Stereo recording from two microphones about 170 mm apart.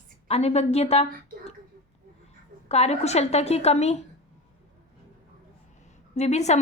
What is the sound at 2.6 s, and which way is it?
A woman's voice, 40° left (ahead or behind).